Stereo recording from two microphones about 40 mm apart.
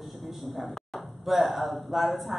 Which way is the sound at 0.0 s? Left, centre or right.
Centre.